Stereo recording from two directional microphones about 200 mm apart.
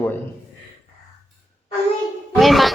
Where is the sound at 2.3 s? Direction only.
Centre (ahead or behind).